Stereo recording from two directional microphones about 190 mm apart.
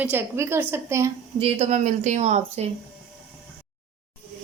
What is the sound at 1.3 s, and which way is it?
Speech, 35° right (ahead or behind).